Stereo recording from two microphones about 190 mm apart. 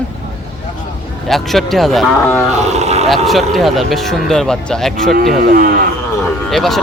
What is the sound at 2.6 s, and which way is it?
Speech, 35° right (ahead or behind).